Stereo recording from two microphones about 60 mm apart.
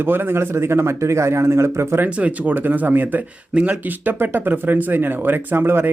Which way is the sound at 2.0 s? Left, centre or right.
Right.